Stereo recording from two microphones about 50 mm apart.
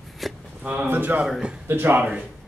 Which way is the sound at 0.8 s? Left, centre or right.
Right.